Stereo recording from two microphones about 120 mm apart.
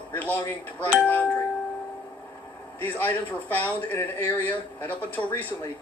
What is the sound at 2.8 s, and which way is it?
A man's voice, 15° left (ahead or behind).